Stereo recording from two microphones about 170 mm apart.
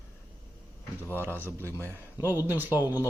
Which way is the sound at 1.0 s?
15° right (ahead or behind).